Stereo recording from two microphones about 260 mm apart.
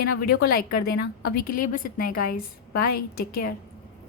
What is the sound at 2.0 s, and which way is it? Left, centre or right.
Speech, left.